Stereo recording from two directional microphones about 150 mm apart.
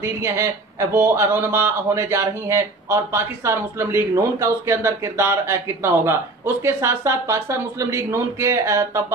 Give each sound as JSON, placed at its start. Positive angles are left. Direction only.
{"t": 0.0, "sound": "speech", "side_deg": -20}